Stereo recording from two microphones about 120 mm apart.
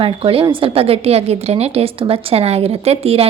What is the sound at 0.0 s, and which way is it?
A woman's voice, 50° right (ahead or behind).